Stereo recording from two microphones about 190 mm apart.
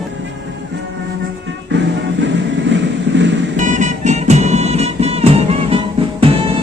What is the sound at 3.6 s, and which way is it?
Music, 40° right (ahead or behind).